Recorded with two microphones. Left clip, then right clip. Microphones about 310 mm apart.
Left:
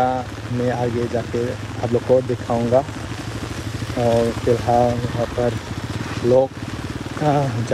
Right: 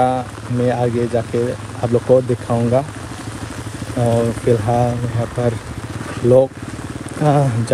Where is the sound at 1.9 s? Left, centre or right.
Right.